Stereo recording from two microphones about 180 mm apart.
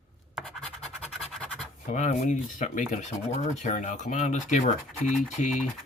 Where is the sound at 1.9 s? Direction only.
40° left (ahead or behind).